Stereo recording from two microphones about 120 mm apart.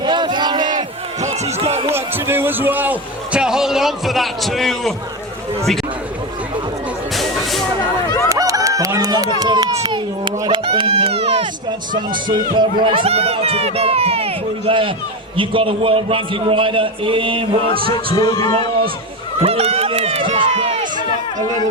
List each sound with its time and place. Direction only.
0.0 s battle cry: 40° right (ahead or behind)
1.2 s speech: 70° right (ahead or behind)
2.1 s a man's voice: 20° right (ahead or behind); by 4.9 s centre (ahead or behind)
8.3 s a sound: 30° right (ahead or behind)
9.4 s speech: 35° right (ahead or behind); by 11.4 s 55° right (ahead or behind)
12.3 s a man's voice: 40° right (ahead or behind)
17.9 s speech: 40° left (ahead or behind)
19.4 s speech: 55° right (ahead or behind)